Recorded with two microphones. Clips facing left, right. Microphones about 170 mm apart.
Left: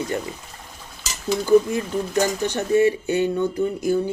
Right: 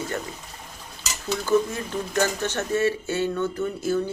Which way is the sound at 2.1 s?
15° left (ahead or behind).